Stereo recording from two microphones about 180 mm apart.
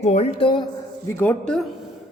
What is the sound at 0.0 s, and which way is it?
Speech, 35° left (ahead or behind).